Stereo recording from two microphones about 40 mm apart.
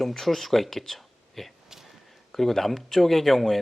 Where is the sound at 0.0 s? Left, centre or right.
Centre.